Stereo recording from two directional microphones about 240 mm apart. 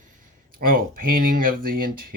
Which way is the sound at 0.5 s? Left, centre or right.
Right.